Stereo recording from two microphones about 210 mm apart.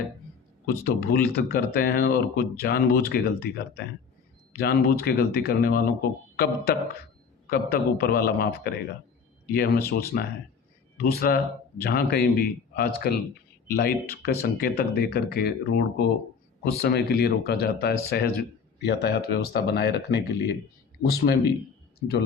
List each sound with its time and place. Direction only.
0.9 s speech: 50° left (ahead or behind)